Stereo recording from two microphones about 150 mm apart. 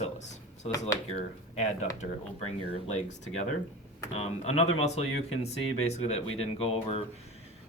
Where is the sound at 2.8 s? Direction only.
45° left (ahead or behind).